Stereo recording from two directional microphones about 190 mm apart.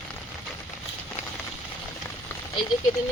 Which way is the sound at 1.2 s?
35° left (ahead or behind).